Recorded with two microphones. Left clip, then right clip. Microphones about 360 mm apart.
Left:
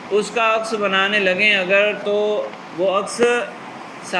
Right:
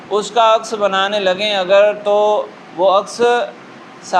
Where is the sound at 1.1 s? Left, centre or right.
Right.